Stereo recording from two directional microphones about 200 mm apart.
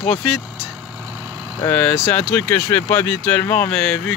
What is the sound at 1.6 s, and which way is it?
Speech, 10° left (ahead or behind).